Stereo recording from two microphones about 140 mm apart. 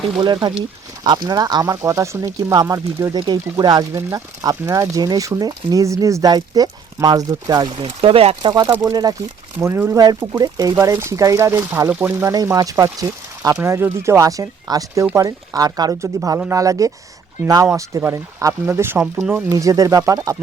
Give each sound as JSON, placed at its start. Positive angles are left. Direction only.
{"t": 0.2, "sound": "speech", "side_deg": -30}
{"t": 7.9, "sound": "speech", "side_deg": -45}
{"t": 8.4, "sound": "speech", "side_deg": -30}
{"t": 9.6, "sound": "speech", "side_deg": -15}